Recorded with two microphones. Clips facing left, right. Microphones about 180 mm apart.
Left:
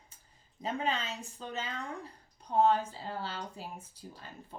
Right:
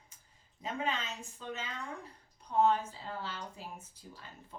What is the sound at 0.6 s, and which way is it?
Speech, 35° left (ahead or behind).